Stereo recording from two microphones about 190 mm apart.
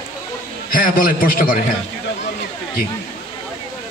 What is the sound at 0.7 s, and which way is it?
Speech, 45° left (ahead or behind).